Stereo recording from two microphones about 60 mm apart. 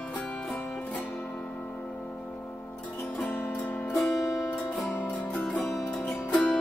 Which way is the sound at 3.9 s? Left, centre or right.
Centre.